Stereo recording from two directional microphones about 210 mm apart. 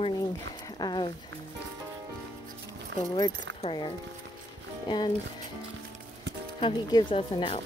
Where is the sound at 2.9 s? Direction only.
20° left (ahead or behind).